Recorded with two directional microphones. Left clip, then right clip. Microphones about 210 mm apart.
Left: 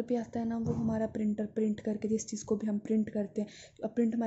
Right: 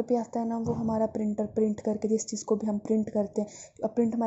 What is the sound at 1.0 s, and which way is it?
Speech, centre (ahead or behind).